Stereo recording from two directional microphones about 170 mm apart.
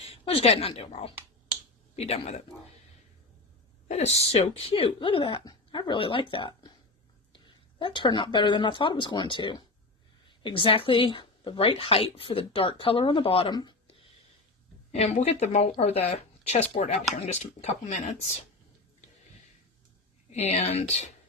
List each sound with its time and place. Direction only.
0.0 s speech: 35° left (ahead or behind)
3.8 s speech: 40° left (ahead or behind)
14.9 s speech: 40° left (ahead or behind)
20.3 s speech: 40° left (ahead or behind)